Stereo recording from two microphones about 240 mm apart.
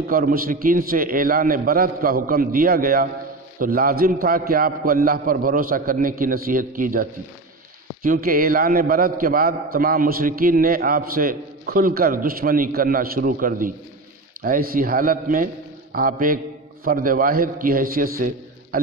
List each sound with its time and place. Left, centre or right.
0.1 s a man's voice: right